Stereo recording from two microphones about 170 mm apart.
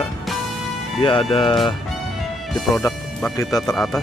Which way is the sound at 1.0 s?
30° left (ahead or behind).